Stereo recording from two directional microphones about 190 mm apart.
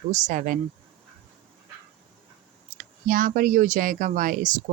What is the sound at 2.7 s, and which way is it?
Speech, 45° right (ahead or behind).